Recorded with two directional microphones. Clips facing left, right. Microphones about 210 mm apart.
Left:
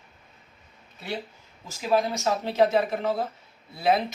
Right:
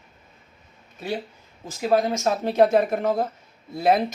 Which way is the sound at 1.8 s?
50° right (ahead or behind).